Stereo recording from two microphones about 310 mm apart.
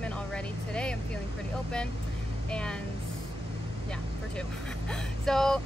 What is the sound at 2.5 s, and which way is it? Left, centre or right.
Speech, centre.